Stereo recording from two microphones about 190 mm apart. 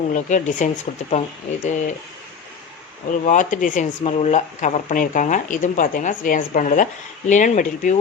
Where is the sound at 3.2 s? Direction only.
40° left (ahead or behind).